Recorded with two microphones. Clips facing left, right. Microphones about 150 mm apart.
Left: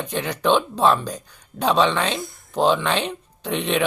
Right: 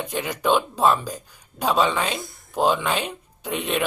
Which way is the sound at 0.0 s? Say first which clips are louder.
Left 2 dB; 10° right (ahead or behind).